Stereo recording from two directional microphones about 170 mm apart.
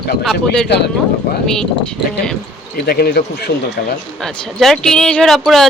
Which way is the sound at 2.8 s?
65° left (ahead or behind).